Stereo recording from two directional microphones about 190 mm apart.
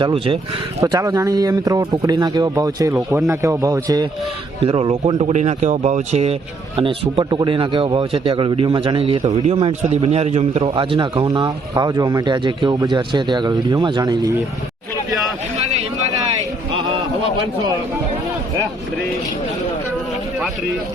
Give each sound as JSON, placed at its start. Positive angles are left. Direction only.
{"t": 0.0, "sound": "a man's voice", "side_deg": -30}
{"t": 0.8, "sound": "a man's voice", "side_deg": -15}
{"t": 4.6, "sound": "a man's voice", "side_deg": -30}
{"t": 16.7, "sound": "a sound", "side_deg": -25}